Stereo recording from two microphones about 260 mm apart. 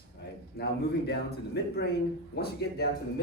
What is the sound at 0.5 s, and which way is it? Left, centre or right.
Speech, left.